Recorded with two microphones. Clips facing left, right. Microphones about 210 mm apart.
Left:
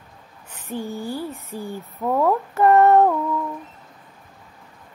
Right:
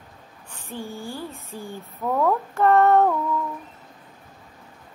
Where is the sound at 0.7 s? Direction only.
15° left (ahead or behind).